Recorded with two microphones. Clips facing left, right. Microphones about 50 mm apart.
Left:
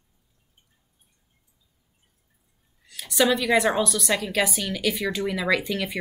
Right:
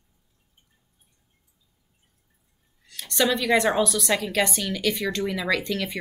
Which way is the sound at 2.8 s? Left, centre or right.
Centre.